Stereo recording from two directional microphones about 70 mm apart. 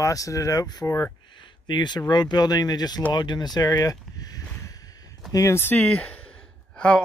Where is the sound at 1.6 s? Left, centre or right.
Left.